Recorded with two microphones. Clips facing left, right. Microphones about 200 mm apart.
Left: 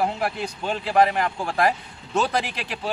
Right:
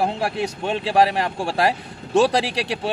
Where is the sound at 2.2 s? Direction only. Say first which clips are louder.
Right 6 dB; 85° right.